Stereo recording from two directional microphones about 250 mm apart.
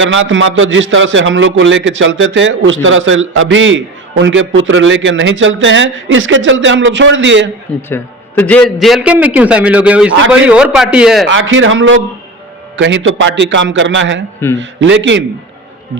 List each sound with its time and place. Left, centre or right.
0.0 s a man's voice: right
7.8 s a man's voice: centre
11.3 s a man's voice: right